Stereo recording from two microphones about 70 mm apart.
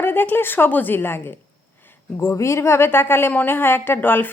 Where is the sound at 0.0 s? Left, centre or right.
Left.